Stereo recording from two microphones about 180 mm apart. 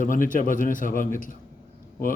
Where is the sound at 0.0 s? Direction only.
45° left (ahead or behind).